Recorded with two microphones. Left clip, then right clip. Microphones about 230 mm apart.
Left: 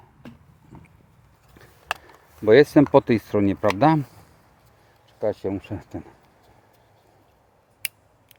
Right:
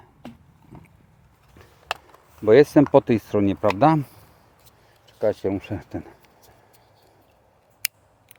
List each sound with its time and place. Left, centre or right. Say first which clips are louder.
0.2 s a sound: right 3 dB; right
2.4 s speech: even; centre
5.0 s speech: right 3 dB; centre
7.8 s scissors: right 3 dB; right